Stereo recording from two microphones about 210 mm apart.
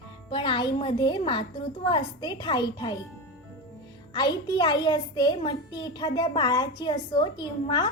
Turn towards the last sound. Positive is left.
turn(degrees=20)  # may be behind; listen again after turning